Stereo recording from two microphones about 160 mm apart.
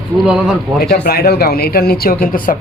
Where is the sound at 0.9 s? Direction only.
70° left (ahead or behind).